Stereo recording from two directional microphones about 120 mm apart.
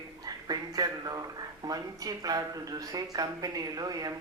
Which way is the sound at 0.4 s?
35° right (ahead or behind).